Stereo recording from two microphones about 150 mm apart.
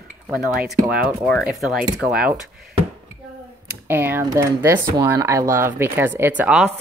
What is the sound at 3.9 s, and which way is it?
Speech, 15° right (ahead or behind).